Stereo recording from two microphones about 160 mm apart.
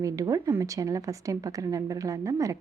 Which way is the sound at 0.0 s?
20° right (ahead or behind).